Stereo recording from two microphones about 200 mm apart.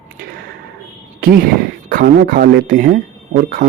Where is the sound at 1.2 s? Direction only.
45° right (ahead or behind).